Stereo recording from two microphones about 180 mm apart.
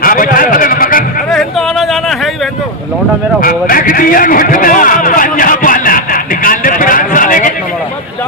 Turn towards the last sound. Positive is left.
turn(degrees=45)  # may be behind; listen again after turning